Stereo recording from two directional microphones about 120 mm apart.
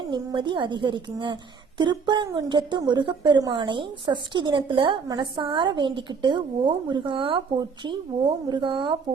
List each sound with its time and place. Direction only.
0.3 s a woman's voice: 40° right (ahead or behind)